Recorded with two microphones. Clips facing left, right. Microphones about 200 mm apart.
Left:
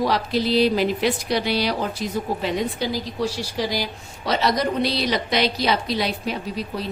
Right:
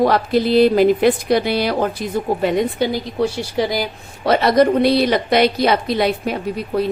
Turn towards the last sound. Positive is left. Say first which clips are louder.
# right 8 dB
turn(degrees=-55)  # may be behind; listen again after turning